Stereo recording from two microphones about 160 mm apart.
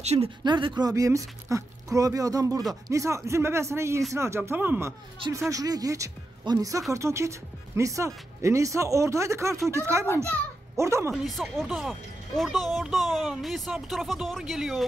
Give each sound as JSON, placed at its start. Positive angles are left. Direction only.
{"t": 0.0, "sound": "speech", "side_deg": -45}
{"t": 0.4, "sound": "speech", "side_deg": -30}
{"t": 11.2, "sound": "speech", "side_deg": 0}